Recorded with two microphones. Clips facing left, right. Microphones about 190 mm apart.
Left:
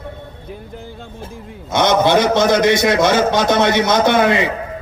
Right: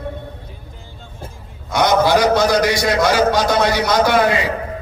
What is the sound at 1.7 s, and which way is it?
Speech, 25° left (ahead or behind).